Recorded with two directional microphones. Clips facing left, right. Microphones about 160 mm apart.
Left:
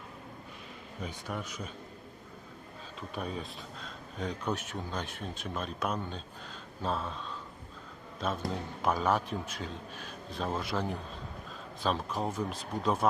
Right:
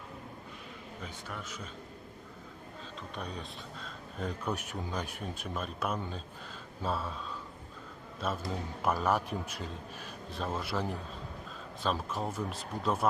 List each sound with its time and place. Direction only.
1.0 s a man's voice: 15° left (ahead or behind)
3.2 s a man's voice: 5° left (ahead or behind)
8.4 s a man's voice: 5° right (ahead or behind)